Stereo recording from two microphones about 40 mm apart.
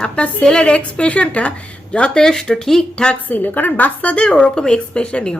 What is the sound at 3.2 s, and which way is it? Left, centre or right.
Speech, left.